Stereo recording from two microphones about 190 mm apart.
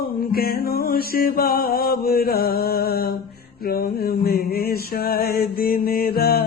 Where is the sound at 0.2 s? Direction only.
50° left (ahead or behind).